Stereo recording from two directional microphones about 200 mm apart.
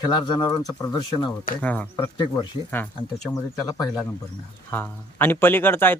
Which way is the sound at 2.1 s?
25° left (ahead or behind).